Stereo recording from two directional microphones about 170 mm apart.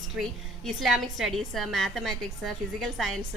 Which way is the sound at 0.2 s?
Centre (ahead or behind).